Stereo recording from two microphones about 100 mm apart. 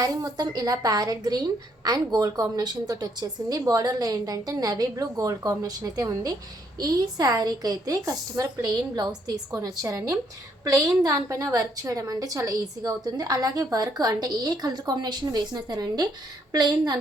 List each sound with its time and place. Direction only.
0.0 s a woman's voice: 40° right (ahead or behind)